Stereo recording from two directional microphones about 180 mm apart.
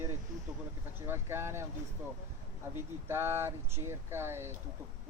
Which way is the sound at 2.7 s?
15° right (ahead or behind).